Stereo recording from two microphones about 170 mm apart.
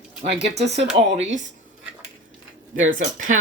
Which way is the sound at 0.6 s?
80° right.